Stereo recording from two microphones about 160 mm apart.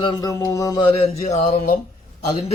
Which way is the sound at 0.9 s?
40° left (ahead or behind).